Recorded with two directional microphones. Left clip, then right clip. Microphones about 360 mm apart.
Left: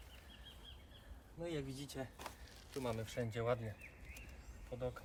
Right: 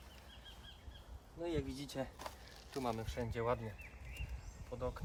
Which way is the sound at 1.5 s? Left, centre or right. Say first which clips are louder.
Right 4 dB; centre.